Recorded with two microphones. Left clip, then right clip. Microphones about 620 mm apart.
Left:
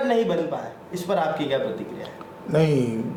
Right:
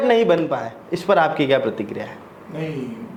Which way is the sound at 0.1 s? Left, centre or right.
Right.